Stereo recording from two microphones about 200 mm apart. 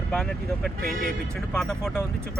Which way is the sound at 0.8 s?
45° right (ahead or behind).